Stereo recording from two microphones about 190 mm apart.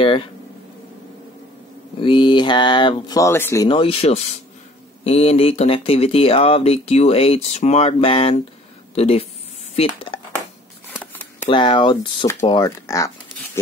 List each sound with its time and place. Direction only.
0.0 s a sound: 30° left (ahead or behind)
2.0 s speech: 25° left (ahead or behind)
3.6 s speech: 30° left (ahead or behind)
11.4 s speech: 25° left (ahead or behind)